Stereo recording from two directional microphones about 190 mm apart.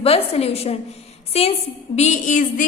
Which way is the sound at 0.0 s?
30° left (ahead or behind).